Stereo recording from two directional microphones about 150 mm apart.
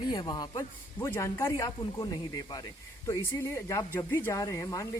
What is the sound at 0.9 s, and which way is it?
Speech, 15° left (ahead or behind).